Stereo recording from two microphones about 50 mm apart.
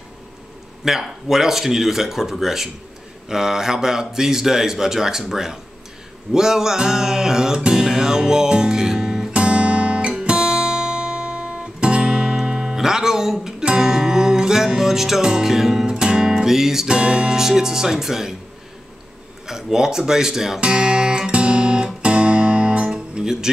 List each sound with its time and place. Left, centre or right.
0.8 s a man's voice: centre
6.3 s music: centre
19.4 s speech: centre
20.6 s music: centre